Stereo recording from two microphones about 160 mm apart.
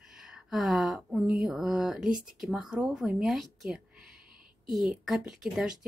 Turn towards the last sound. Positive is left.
turn(degrees=-5)  # may be behind; listen again after turning